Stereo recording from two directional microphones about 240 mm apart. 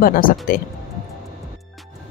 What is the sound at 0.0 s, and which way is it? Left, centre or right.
Speech, left.